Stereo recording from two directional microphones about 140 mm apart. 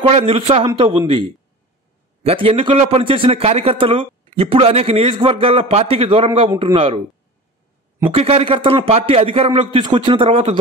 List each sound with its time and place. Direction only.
0.0 s a man's voice: 45° right (ahead or behind)
8.1 s a man's voice: 45° right (ahead or behind)